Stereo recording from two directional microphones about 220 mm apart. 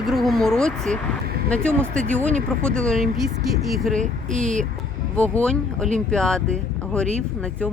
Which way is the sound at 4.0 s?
35° right (ahead or behind).